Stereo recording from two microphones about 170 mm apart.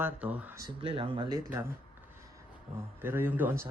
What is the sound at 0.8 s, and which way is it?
Speech, 30° right (ahead or behind).